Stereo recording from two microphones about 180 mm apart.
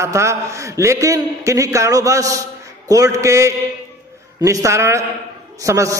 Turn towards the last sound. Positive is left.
turn(degrees=-15)  # may be behind; listen again after turning